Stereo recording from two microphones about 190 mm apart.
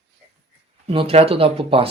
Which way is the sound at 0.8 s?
30° right (ahead or behind).